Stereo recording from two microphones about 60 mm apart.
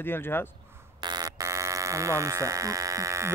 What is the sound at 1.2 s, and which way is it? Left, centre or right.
Speech, right.